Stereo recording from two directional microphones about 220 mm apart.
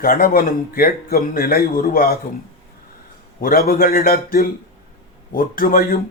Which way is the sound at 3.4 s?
40° left (ahead or behind).